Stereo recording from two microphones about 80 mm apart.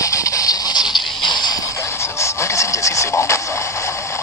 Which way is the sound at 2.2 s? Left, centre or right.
Left.